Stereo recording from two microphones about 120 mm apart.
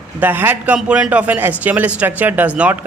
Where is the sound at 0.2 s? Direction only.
15° right (ahead or behind).